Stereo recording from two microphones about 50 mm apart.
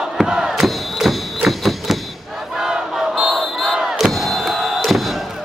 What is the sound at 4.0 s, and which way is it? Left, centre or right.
Music, centre.